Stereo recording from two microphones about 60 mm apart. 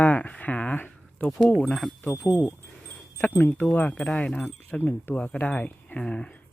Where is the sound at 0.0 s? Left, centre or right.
Left.